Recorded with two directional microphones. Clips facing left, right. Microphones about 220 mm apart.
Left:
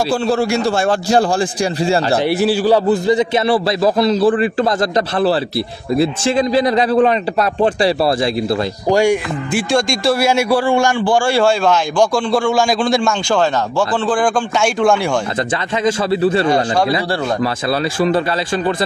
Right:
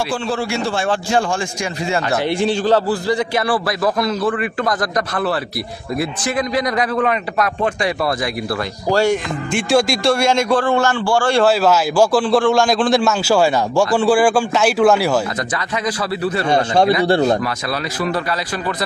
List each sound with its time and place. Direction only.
0.1 s a man's voice: 40° left (ahead or behind)
2.2 s a man's voice: 5° left (ahead or behind); by 4.7 s 30° left (ahead or behind)
5.9 s a man's voice: 25° left (ahead or behind)
8.9 s a man's voice: 10° left (ahead or behind)
11.3 s a man's voice: 5° right (ahead or behind)
15.8 s a man's voice: 25° left (ahead or behind)
16.4 s a man's voice: 25° right (ahead or behind)